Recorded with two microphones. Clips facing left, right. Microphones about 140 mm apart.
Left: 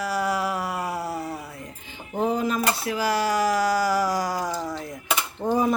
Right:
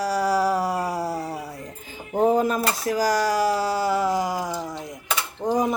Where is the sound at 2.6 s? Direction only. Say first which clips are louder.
Right 2 dB; 40° right (ahead or behind).